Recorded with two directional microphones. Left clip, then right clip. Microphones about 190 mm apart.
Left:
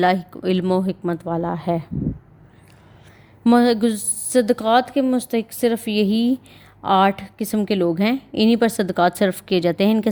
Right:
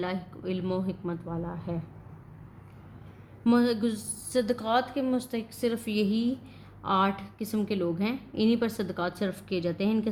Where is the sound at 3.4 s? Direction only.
45° left (ahead or behind).